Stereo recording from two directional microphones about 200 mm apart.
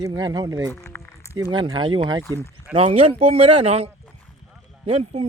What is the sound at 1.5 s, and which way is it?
Speech, 25° right (ahead or behind).